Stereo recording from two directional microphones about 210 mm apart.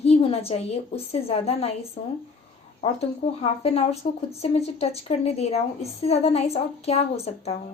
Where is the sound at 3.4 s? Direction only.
30° left (ahead or behind).